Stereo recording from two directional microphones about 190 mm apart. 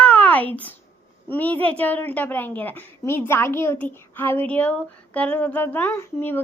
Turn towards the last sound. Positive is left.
turn(degrees=10)  # may be behind; listen again after turning